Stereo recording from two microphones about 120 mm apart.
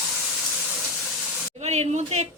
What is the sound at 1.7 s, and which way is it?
Speech, 60° right (ahead or behind).